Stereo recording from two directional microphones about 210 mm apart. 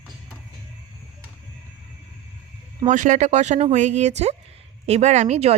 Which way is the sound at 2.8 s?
35° right (ahead or behind).